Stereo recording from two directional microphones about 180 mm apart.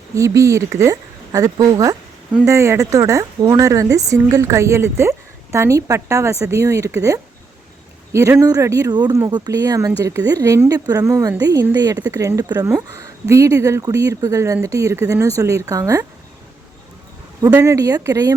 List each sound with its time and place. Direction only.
0.1 s a woman's voice: 15° right (ahead or behind)
17.5 s a woman's voice: 15° right (ahead or behind)